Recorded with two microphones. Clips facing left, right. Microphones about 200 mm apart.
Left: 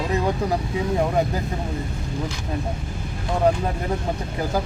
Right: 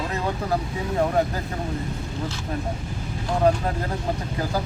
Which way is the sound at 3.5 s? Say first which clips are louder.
Even; 20° left (ahead or behind).